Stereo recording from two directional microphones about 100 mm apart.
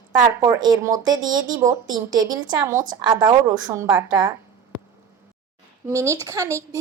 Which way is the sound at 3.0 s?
45° right (ahead or behind).